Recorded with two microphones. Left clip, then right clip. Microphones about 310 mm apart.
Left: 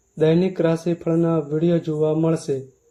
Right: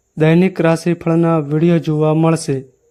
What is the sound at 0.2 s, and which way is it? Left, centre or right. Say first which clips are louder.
A man's voice: right 4 dB; right.